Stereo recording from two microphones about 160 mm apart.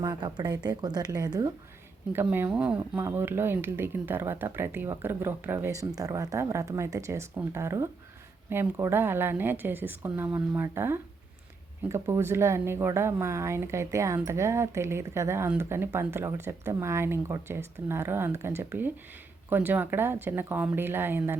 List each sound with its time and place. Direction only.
0.0 s speech: 25° right (ahead or behind)
2.1 s speech: 15° right (ahead or behind)